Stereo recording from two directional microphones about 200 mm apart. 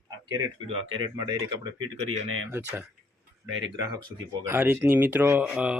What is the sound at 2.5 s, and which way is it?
Speech, 10° right (ahead or behind).